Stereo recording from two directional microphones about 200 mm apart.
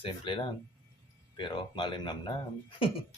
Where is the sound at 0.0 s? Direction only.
25° left (ahead or behind).